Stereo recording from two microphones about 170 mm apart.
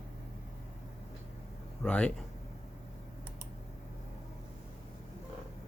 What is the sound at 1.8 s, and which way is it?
Speech, 5° left (ahead or behind).